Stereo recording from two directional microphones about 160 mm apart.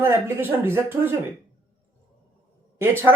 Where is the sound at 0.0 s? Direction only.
15° right (ahead or behind).